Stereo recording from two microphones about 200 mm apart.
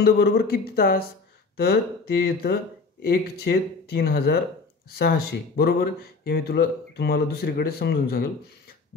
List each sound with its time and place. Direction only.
0.0 s speech: 50° left (ahead or behind)